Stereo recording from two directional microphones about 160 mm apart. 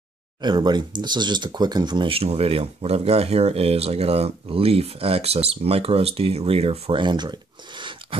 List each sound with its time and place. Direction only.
0.4 s speech: 25° right (ahead or behind)